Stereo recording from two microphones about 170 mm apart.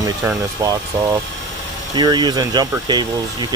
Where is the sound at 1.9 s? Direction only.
25° right (ahead or behind).